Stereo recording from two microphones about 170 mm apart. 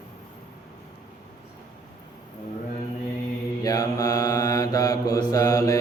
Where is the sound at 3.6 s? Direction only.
20° left (ahead or behind).